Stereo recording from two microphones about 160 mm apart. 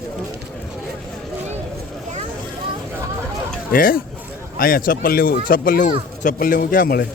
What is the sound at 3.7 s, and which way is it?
Speech, 60° left (ahead or behind).